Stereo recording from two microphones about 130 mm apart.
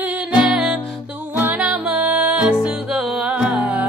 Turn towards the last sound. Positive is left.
turn(degrees=-10)  # may be behind; listen again after turning